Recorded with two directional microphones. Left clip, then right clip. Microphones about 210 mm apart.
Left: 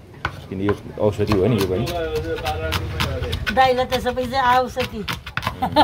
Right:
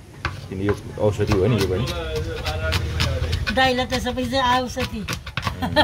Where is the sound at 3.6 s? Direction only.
40° left (ahead or behind).